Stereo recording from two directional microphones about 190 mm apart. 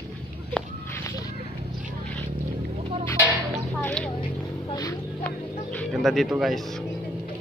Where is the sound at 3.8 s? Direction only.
10° left (ahead or behind).